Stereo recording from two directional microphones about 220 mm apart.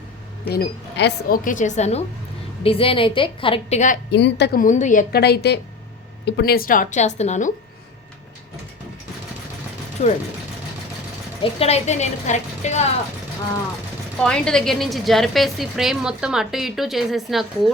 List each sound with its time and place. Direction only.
0.4 s speech: 45° left (ahead or behind)
1.5 s a woman's voice: 35° left (ahead or behind)
4.1 s speech: 50° left (ahead or behind)
4.6 s a woman's voice: 35° left (ahead or behind)
10.0 s a woman's voice: 30° left (ahead or behind)
11.6 s a woman's voice: 30° left (ahead or behind)
14.2 s a woman's voice: 5° left (ahead or behind)